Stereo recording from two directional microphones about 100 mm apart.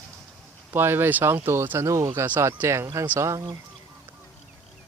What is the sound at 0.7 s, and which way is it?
Speech, 20° right (ahead or behind).